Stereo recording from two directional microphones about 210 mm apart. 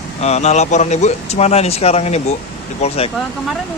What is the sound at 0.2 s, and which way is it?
Speech, 30° left (ahead or behind).